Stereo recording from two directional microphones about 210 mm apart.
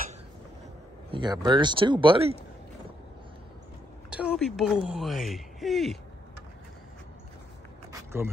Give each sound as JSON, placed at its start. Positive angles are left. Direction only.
{"t": 1.1, "sound": "speech", "side_deg": -20}
{"t": 4.1, "sound": "speech", "side_deg": -5}
{"t": 7.9, "sound": "a sound", "side_deg": -10}